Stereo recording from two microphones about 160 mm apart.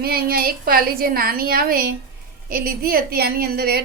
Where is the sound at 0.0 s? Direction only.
70° right (ahead or behind).